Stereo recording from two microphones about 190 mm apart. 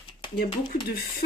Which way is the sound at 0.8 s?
55° left (ahead or behind).